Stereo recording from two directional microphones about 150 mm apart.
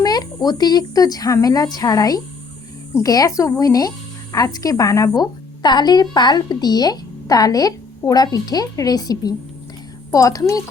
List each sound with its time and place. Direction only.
0.0 s speech: 25° left (ahead or behind)